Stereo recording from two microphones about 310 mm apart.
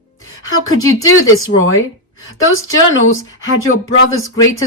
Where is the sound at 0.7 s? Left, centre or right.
Centre.